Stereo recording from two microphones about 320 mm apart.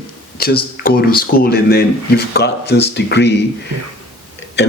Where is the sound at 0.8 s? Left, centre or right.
Left.